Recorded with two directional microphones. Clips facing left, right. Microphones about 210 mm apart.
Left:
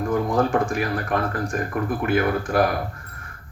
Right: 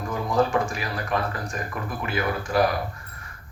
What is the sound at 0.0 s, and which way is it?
Speech, 55° left (ahead or behind).